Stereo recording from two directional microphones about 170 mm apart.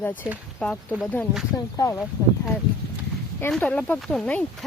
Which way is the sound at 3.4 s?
10° left (ahead or behind).